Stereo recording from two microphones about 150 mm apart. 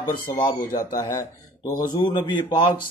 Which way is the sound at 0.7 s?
65° left (ahead or behind).